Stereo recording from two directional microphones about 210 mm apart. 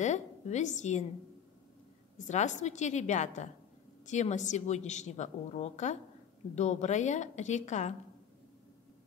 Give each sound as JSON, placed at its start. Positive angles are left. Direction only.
{"t": 0.0, "sound": "a woman's voice", "side_deg": 35}
{"t": 2.1, "sound": "a woman's voice", "side_deg": 35}